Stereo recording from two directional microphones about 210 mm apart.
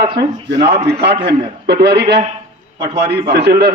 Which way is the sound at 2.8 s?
25° right (ahead or behind).